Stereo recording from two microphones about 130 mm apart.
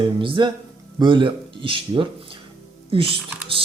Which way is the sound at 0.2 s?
40° right (ahead or behind).